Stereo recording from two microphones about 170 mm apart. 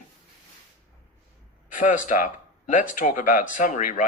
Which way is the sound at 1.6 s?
50° left (ahead or behind).